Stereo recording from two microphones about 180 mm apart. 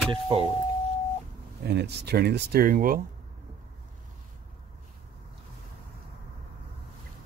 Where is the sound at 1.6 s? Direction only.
65° right (ahead or behind).